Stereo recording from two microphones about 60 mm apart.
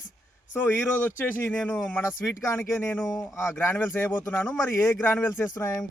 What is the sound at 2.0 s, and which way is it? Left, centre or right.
Speech, left.